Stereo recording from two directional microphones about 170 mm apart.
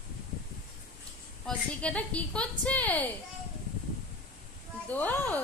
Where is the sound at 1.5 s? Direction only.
5° left (ahead or behind).